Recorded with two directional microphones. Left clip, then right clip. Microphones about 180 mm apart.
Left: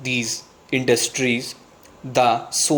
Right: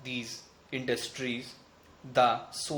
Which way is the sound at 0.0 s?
35° left (ahead or behind).